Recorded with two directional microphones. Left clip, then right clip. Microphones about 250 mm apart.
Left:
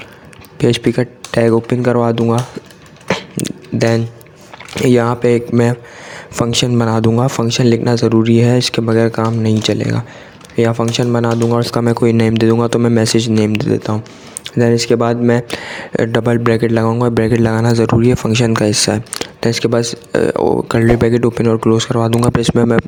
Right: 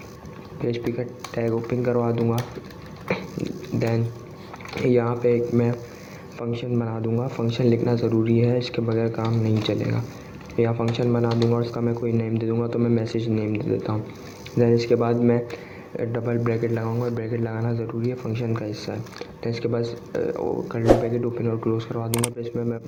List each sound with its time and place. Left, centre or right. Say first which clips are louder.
0.6 s speech: left 12 dB; left
3.1 s a sound: left 9 dB; left
4.7 s speech: left 9 dB; left